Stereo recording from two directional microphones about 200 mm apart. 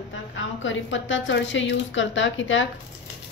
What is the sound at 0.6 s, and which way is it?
A woman's voice, 70° left (ahead or behind).